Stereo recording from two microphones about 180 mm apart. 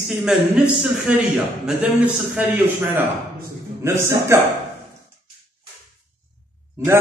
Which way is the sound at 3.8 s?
15° right (ahead or behind).